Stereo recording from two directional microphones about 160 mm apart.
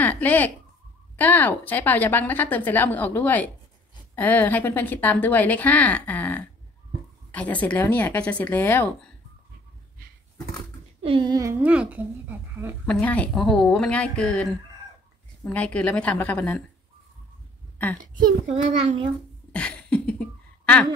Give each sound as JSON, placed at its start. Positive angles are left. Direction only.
{"t": 0.0, "sound": "a woman's voice", "side_deg": 10}
{"t": 11.0, "sound": "a child's voice", "side_deg": -30}
{"t": 12.8, "sound": "a woman's voice", "side_deg": 10}
{"t": 17.7, "sound": "a woman's voice", "side_deg": 10}
{"t": 18.5, "sound": "a child's voice", "side_deg": -40}
{"t": 19.5, "sound": "cough", "side_deg": 5}